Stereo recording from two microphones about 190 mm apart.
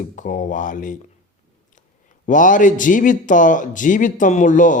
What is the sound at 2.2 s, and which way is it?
A man's voice, 45° left (ahead or behind).